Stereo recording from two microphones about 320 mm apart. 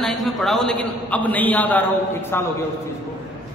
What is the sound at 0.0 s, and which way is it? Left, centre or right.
A man's voice, centre.